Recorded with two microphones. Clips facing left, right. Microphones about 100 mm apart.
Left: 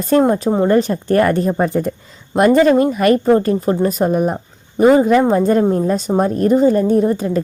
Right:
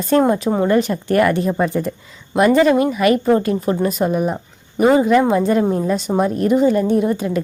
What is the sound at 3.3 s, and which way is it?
A woman's voice, 35° left (ahead or behind).